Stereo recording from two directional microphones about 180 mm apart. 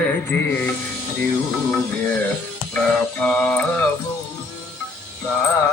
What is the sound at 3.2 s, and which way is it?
Music, 10° left (ahead or behind).